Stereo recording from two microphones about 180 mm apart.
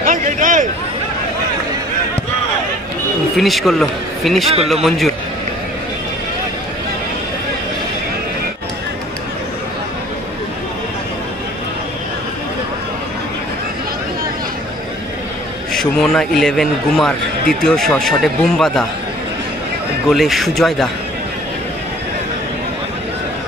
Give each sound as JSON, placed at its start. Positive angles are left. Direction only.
{"t": 0.0, "sound": "a sound", "side_deg": -45}
{"t": 3.3, "sound": "a man's voice", "side_deg": 0}
{"t": 15.7, "sound": "a man's voice", "side_deg": 5}
{"t": 20.1, "sound": "a man's voice", "side_deg": 0}